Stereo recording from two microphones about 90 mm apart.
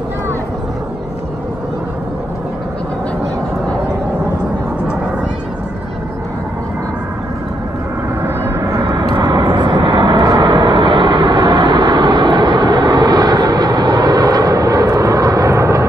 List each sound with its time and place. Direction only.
8.6 s vehicle: 45° right (ahead or behind)
10.2 s vehicle: 45° right (ahead or behind)